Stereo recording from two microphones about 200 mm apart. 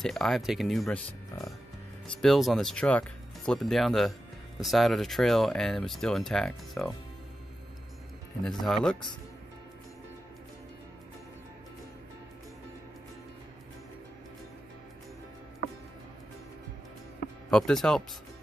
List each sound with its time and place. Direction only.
0.0 s speech: centre (ahead or behind)
1.3 s speech: 15° left (ahead or behind)
2.2 s speech: centre (ahead or behind)
8.5 s speech: centre (ahead or behind)
17.5 s speech: 5° left (ahead or behind)